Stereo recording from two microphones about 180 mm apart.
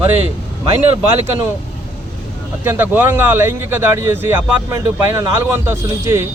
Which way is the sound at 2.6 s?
10° right (ahead or behind).